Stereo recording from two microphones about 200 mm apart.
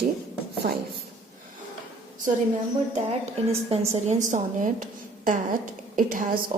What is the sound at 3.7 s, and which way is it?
A woman's voice, 35° right (ahead or behind).